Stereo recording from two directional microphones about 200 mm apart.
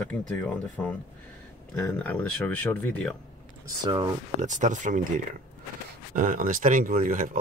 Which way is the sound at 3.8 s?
20° right (ahead or behind).